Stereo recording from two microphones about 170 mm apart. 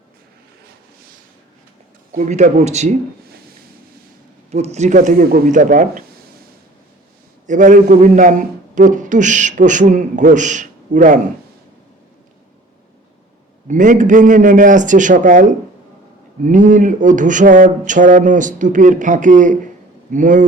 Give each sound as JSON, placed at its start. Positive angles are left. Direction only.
{"t": 2.1, "sound": "a man's voice", "side_deg": -45}
{"t": 4.5, "sound": "a man's voice", "side_deg": -40}
{"t": 7.4, "sound": "a man's voice", "side_deg": -45}
{"t": 13.7, "sound": "a man's voice", "side_deg": -50}